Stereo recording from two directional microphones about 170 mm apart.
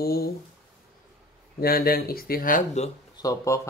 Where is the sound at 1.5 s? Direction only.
60° left (ahead or behind); by 2.9 s 45° left (ahead or behind).